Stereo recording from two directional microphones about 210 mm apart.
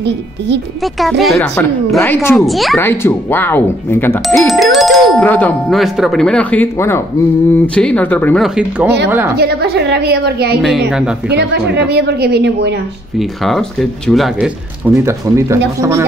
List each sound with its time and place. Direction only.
0.9 s speech: centre (ahead or behind)
2.8 s speech: 10° left (ahead or behind)
4.4 s speech: centre (ahead or behind)
8.5 s speech: 5° right (ahead or behind)
9.4 s a woman's voice: 50° right (ahead or behind)
10.6 s speech: centre (ahead or behind)
11.2 s a woman's voice: 55° right (ahead or behind)
13.2 s speech: centre (ahead or behind)
15.0 s speech: 15° right (ahead or behind)